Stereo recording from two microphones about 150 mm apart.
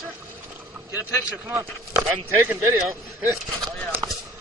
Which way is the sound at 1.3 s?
10° right (ahead or behind).